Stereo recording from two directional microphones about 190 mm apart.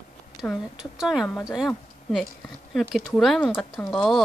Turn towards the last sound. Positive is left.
turn(degrees=0)  # may be behind; listen again after turning